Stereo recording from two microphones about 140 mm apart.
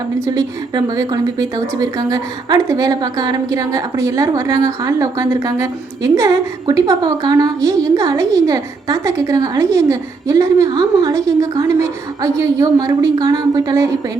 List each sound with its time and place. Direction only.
0.3 s a woman's voice: 30° right (ahead or behind)